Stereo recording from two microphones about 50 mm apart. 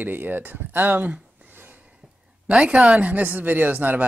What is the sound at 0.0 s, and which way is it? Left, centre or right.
Speech, right.